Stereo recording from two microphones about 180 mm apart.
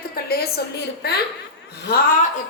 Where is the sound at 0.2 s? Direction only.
60° left (ahead or behind).